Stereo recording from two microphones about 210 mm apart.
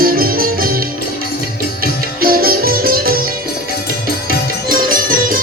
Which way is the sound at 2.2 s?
45° right (ahead or behind).